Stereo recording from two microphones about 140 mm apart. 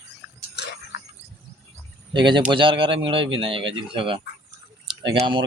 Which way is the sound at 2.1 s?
35° right (ahead or behind).